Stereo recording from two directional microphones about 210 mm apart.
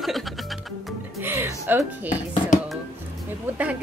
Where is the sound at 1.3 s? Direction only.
10° right (ahead or behind).